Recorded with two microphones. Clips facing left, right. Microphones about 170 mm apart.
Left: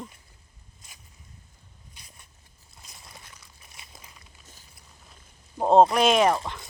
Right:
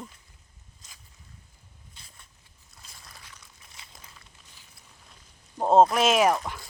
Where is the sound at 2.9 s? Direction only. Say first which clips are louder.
Left 2 dB; 20° left (ahead or behind).